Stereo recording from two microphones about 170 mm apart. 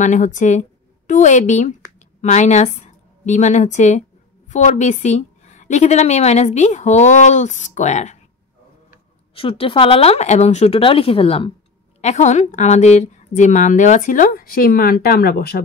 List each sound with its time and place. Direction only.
0.0 s a woman's voice: 45° left (ahead or behind)
9.3 s a woman's voice: 35° left (ahead or behind); by 15.6 s 65° left (ahead or behind)